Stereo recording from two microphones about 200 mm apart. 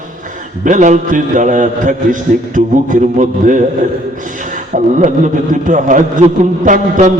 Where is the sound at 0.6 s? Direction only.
40° right (ahead or behind).